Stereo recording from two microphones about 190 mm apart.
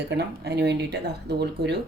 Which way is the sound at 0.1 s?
60° right (ahead or behind).